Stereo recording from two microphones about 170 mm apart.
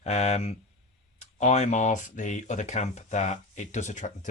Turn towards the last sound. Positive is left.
turn(degrees=45)  # may be behind; listen again after turning